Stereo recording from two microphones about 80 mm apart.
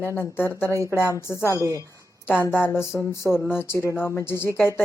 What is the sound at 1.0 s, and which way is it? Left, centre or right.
Speech, left.